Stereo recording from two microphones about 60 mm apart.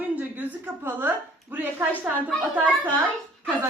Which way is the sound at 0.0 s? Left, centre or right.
Right.